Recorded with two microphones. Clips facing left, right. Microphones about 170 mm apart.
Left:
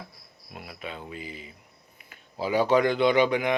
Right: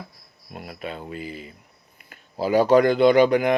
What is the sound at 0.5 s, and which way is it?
Speech, 45° right (ahead or behind).